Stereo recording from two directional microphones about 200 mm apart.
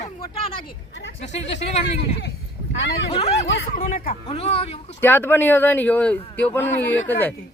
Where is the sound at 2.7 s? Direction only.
65° left (ahead or behind).